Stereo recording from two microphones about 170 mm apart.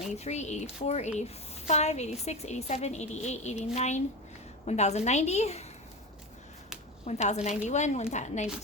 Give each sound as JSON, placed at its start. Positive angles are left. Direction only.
{"t": 0.3, "sound": "speech", "side_deg": 40}
{"t": 7.0, "sound": "a woman's voice", "side_deg": 40}